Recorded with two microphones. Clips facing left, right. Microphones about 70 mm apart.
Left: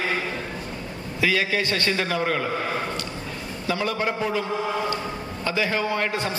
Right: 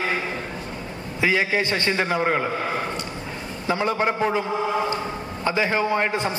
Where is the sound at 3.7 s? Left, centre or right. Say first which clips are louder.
Right 3 dB; right.